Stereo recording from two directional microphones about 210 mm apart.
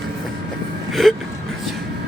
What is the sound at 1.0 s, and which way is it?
Speech, centre (ahead or behind).